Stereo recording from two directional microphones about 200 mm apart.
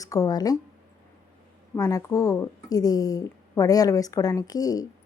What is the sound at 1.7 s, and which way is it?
A woman's voice, 15° left (ahead or behind).